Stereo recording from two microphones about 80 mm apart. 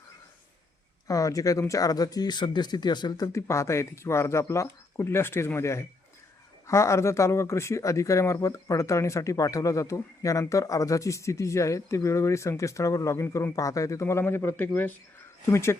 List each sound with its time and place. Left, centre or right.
1.0 s speech: left
3.3 s speech: left